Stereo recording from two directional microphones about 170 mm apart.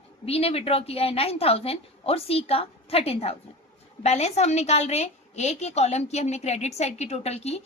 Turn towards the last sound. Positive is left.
turn(degrees=40)  # may be behind; listen again after turning